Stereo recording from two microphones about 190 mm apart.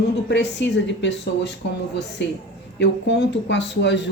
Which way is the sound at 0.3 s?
65° left (ahead or behind).